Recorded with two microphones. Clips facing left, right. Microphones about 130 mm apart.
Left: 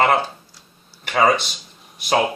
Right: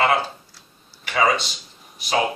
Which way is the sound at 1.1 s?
50° left (ahead or behind).